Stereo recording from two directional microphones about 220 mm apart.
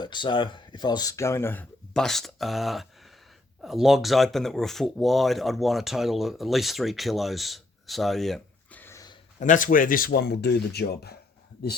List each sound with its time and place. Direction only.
0.0 s speech: 20° left (ahead or behind)
9.4 s speech: 35° left (ahead or behind)